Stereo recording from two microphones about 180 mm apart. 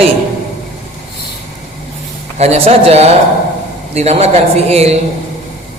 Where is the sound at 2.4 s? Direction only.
35° right (ahead or behind).